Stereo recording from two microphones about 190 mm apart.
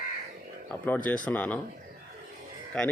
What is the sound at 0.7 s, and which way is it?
Speech, 10° left (ahead or behind).